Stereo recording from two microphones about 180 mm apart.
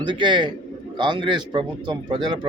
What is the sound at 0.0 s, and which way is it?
Speech, 25° right (ahead or behind).